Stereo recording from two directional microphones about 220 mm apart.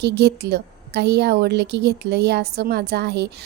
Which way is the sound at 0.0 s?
50° right (ahead or behind).